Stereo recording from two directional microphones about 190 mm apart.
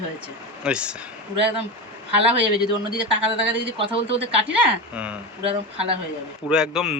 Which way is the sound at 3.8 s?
30° right (ahead or behind).